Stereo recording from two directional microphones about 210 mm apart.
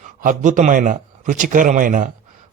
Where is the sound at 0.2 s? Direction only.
40° right (ahead or behind).